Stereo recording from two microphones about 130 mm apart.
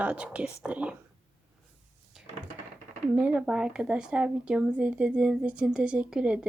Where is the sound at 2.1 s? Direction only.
5° right (ahead or behind).